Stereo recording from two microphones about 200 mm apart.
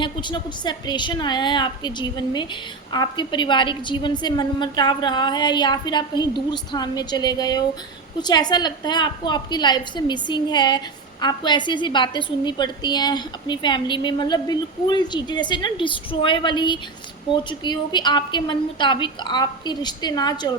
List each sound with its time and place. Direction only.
0.0 s a woman's voice: 25° left (ahead or behind)